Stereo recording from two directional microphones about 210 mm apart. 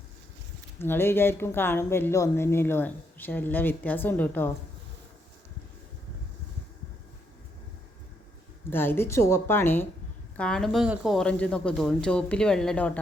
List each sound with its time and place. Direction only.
0.8 s speech: 10° left (ahead or behind)
8.7 s speech: 10° left (ahead or behind)